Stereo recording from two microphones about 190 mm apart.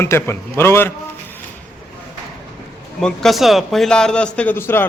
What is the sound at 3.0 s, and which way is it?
A man's voice, centre (ahead or behind).